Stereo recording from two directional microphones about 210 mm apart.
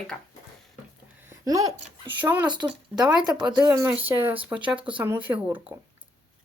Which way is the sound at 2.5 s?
20° right (ahead or behind).